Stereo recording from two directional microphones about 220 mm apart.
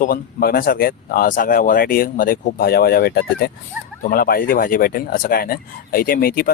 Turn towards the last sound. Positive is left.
turn(degrees=40)  # may be behind; listen again after turning